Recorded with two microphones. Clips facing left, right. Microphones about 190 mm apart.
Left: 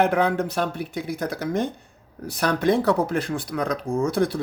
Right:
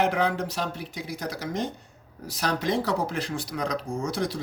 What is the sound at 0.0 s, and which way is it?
Speech, 55° left (ahead or behind).